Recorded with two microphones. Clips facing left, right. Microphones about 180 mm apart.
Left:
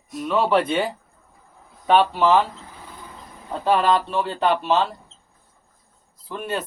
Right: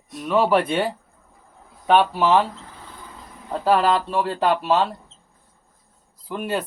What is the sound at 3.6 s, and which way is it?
Speech, 5° right (ahead or behind).